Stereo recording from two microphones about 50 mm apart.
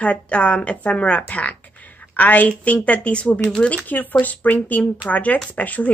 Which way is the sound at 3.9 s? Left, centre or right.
Left.